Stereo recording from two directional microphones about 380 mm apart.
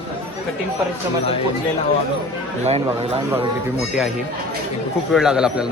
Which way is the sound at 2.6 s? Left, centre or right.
Centre.